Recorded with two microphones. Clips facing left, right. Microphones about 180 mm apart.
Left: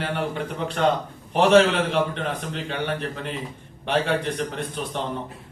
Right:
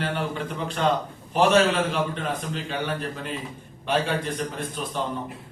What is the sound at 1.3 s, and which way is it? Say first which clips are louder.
A man's voice: left 3 dB; 65° left (ahead or behind).